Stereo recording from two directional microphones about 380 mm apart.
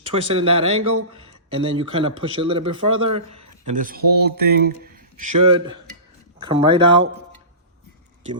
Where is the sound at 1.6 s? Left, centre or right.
Centre.